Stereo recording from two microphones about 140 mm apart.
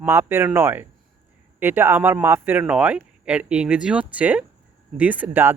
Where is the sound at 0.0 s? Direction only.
15° right (ahead or behind).